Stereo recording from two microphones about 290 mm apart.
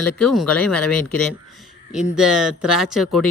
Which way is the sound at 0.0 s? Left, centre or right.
Centre.